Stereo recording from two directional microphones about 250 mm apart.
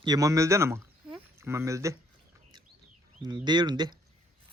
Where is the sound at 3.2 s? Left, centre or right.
Centre.